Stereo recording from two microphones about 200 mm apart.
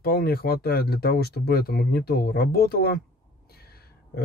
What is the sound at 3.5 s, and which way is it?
Gasp, 50° left (ahead or behind).